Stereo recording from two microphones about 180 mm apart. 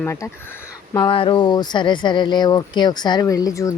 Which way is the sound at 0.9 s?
30° left (ahead or behind).